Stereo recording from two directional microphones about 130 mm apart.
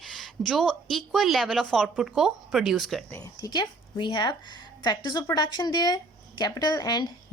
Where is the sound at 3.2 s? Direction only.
30° left (ahead or behind).